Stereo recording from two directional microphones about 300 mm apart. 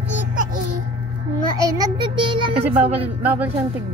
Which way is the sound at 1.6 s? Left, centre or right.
Centre.